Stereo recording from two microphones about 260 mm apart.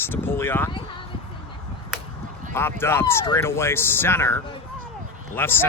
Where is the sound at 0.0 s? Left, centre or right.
Centre.